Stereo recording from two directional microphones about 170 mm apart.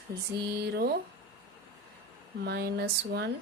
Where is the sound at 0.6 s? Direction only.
70° right (ahead or behind).